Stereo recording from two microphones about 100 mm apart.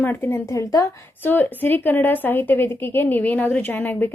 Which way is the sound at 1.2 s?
20° left (ahead or behind).